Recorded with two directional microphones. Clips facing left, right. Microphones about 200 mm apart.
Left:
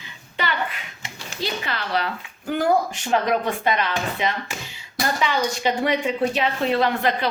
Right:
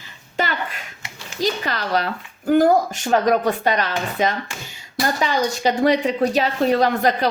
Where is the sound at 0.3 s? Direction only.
45° right (ahead or behind).